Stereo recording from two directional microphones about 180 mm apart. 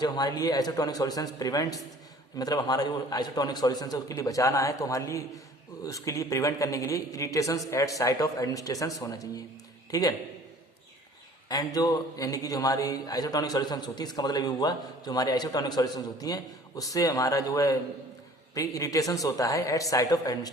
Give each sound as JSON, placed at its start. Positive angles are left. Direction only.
{"t": 0.0, "sound": "a man's voice", "side_deg": 20}
{"t": 11.4, "sound": "a man's voice", "side_deg": 20}